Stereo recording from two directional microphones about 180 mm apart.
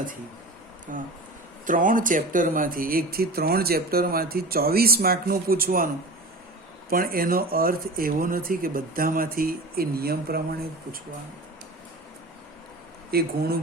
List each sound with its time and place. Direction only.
0.9 s speech: 50° right (ahead or behind)
6.9 s speech: 55° right (ahead or behind)
13.1 s speech: 60° right (ahead or behind)